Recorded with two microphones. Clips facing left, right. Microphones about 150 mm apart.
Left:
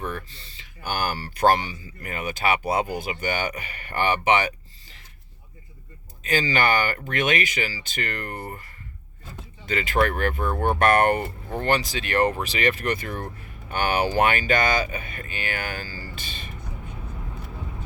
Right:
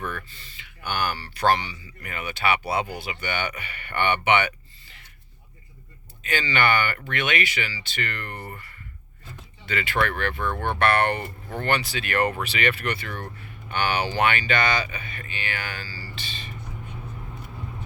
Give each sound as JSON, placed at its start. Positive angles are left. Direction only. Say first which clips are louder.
{"t": 0.0, "sound": "speech", "louder": "left 1 dB", "side_deg": 30}
{"t": 6.2, "sound": "speech", "louder": "left 2 dB", "side_deg": 40}
{"t": 11.2, "sound": "speech", "louder": "left 3 dB", "side_deg": 30}